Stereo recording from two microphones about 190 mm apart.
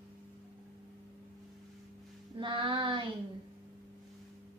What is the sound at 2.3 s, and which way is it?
Music, 25° right (ahead or behind).